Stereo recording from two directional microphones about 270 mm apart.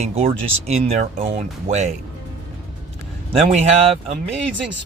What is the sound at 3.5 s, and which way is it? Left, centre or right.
Speech, right.